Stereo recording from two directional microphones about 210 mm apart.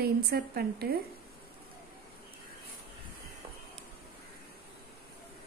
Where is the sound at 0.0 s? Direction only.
50° right (ahead or behind).